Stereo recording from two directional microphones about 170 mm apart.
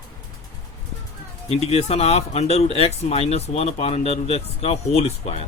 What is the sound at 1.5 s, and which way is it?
Speech, 40° left (ahead or behind).